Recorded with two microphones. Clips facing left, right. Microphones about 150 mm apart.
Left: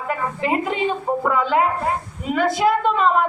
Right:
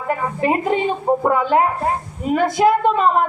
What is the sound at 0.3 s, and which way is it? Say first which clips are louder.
A woman's voice: right 4 dB; 45° right (ahead or behind).